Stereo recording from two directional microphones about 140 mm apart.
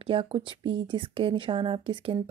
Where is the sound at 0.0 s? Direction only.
40° right (ahead or behind).